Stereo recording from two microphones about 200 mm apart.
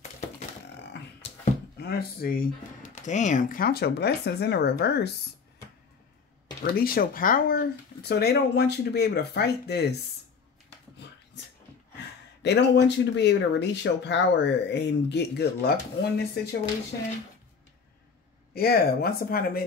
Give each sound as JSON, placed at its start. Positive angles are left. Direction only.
{"t": 1.8, "sound": "speech", "side_deg": 50}
{"t": 6.6, "sound": "speech", "side_deg": 50}
{"t": 12.4, "sound": "speech", "side_deg": 60}
{"t": 18.5, "sound": "speech", "side_deg": 50}